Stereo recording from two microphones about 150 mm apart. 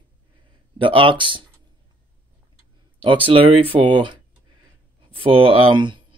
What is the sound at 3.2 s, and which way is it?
Speech, 35° right (ahead or behind).